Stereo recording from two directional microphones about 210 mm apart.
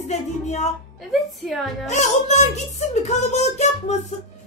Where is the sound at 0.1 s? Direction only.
30° left (ahead or behind).